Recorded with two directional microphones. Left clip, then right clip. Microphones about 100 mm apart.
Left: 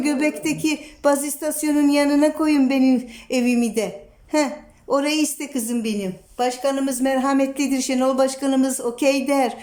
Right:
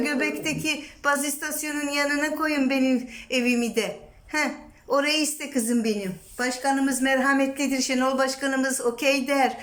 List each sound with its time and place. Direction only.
0.0 s a woman's voice: 35° left (ahead or behind)